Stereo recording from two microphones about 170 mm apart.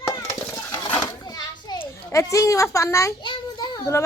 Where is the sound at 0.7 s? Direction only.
25° left (ahead or behind).